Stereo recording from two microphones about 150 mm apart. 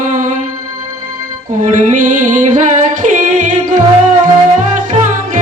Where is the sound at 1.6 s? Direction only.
55° right (ahead or behind).